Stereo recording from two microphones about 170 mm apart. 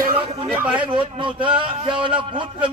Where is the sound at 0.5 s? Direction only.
10° right (ahead or behind).